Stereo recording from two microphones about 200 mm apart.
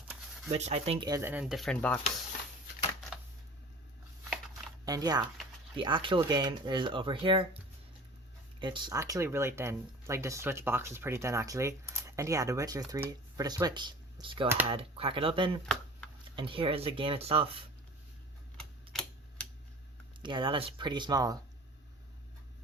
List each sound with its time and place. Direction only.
0.5 s speech: 30° right (ahead or behind)
1.0 s speech: 15° right (ahead or behind); by 2.0 s 5° left (ahead or behind)
4.9 s speech: 20° right (ahead or behind)
20.2 s speech: 25° right (ahead or behind)